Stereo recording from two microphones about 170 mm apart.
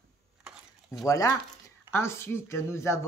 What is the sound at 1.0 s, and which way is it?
Speech, 20° left (ahead or behind).